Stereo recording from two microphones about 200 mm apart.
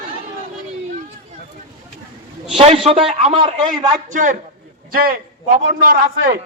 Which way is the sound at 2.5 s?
30° right (ahead or behind).